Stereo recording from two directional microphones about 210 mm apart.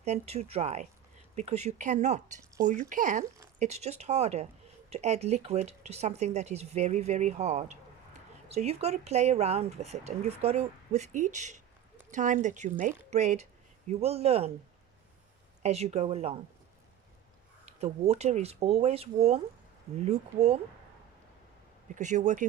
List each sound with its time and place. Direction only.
0.0 s speech: 30° right (ahead or behind)
15.6 s speech: 30° right (ahead or behind)
18.0 s speech: 30° right (ahead or behind)
21.9 s speech: 35° right (ahead or behind)